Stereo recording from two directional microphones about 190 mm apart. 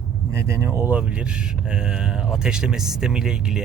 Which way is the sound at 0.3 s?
15° right (ahead or behind).